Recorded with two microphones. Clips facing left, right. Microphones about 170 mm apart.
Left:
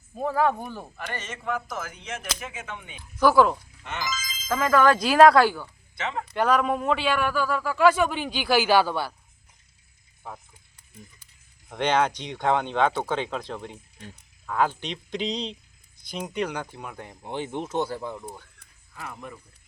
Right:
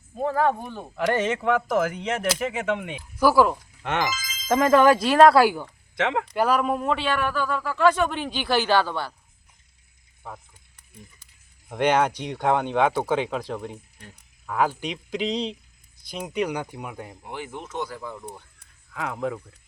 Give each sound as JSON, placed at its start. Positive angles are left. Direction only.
{"t": 0.2, "sound": "speech", "side_deg": 10}
{"t": 1.2, "sound": "speech", "side_deg": -75}
{"t": 3.2, "sound": "speech", "side_deg": -5}
{"t": 4.4, "sound": "speech", "side_deg": -30}
{"t": 4.9, "sound": "speech", "side_deg": 0}
{"t": 5.4, "sound": "speech", "side_deg": -15}
{"t": 6.0, "sound": "speech", "side_deg": -80}
{"t": 6.3, "sound": "speech", "side_deg": -5}
{"t": 11.7, "sound": "speech", "side_deg": -10}
{"t": 17.2, "sound": "speech", "side_deg": 25}
{"t": 18.9, "sound": "speech", "side_deg": -85}